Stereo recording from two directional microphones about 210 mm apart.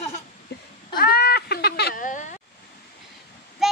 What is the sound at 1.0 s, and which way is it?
Cat, 50° left (ahead or behind).